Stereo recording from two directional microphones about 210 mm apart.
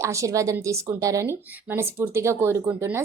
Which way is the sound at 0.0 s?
15° right (ahead or behind).